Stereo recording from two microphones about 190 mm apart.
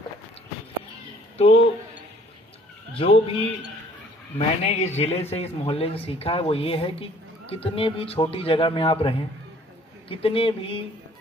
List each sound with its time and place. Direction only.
1.4 s speech: 30° left (ahead or behind)
2.9 s speech: 30° left (ahead or behind)